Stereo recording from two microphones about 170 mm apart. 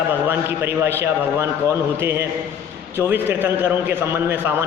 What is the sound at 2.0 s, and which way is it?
A man's voice, 15° right (ahead or behind).